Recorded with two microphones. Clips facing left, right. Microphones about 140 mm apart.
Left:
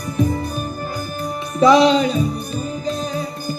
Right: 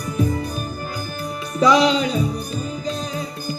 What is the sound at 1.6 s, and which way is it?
Music, 30° left (ahead or behind).